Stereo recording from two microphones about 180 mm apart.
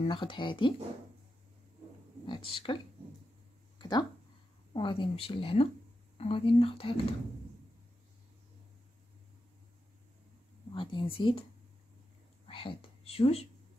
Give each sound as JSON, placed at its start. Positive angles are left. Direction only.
{"t": 0.0, "sound": "speech", "side_deg": 25}
{"t": 2.2, "sound": "speech", "side_deg": 25}
{"t": 3.7, "sound": "a sound", "side_deg": 25}
{"t": 4.7, "sound": "speech", "side_deg": 30}
{"t": 10.7, "sound": "speech", "side_deg": 25}
{"t": 12.4, "sound": "speech", "side_deg": 30}